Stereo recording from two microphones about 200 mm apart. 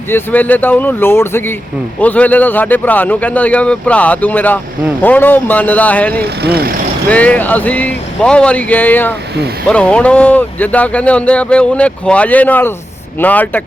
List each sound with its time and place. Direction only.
0.1 s speech: 10° left (ahead or behind)
6.2 s speech: 55° right (ahead or behind)
7.1 s speech: 5° left (ahead or behind)